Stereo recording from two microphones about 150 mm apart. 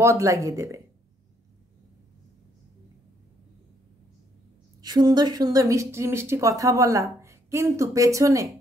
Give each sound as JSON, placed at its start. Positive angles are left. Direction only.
{"t": 0.0, "sound": "speech", "side_deg": -20}
{"t": 4.8, "sound": "speech", "side_deg": -25}